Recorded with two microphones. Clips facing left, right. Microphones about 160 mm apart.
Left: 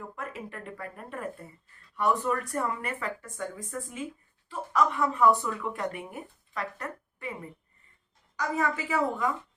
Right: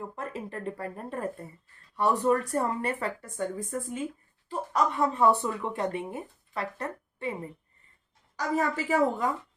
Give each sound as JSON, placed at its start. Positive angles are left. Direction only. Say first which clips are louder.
{"t": 0.2, "sound": "a woman's voice", "louder": "right 2 dB", "side_deg": -30}
{"t": 8.4, "sound": "speech", "louder": "right 1 dB", "side_deg": -35}